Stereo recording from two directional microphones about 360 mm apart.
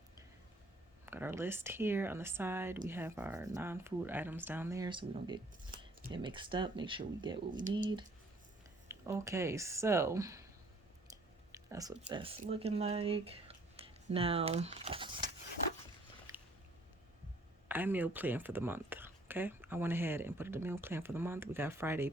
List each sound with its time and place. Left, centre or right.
1.0 s speech: centre
16.3 s a sound: centre
17.7 s speech: centre